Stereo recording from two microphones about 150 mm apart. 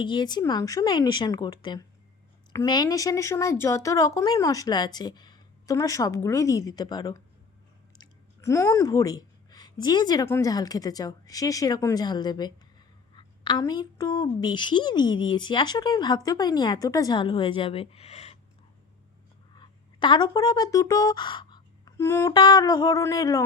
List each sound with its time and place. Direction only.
0.0 s a woman's voice: 30° left (ahead or behind)
7.9 s chewing: 20° left (ahead or behind)
10.2 s a woman's voice: 20° left (ahead or behind); by 18.3 s 45° left (ahead or behind)
19.5 s a sound: 30° left (ahead or behind)
21.9 s music: 20° left (ahead or behind)
22.3 s a woman's voice: 30° left (ahead or behind)